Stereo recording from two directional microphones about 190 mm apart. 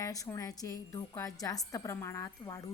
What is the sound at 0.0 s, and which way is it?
A woman's voice, 15° left (ahead or behind).